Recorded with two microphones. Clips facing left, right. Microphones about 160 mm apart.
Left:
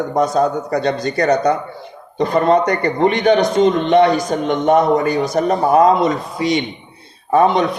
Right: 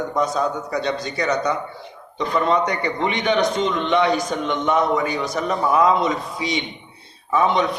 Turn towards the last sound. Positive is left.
turn(degrees=50)  # may be behind; listen again after turning